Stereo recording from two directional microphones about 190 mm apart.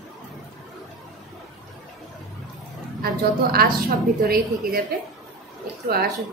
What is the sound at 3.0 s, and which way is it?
A woman's voice, 50° right (ahead or behind).